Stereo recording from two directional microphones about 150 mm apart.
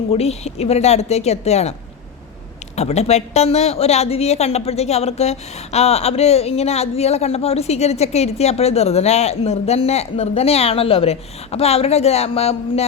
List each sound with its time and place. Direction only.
0.1 s a woman's voice: 45° left (ahead or behind)
2.7 s a woman's voice: 45° left (ahead or behind)